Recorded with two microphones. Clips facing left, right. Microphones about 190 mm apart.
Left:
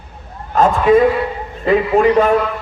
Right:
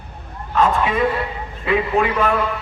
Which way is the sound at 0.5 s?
45° left (ahead or behind).